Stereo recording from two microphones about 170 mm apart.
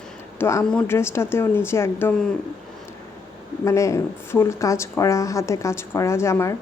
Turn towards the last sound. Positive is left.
turn(degrees=15)  # may be behind; listen again after turning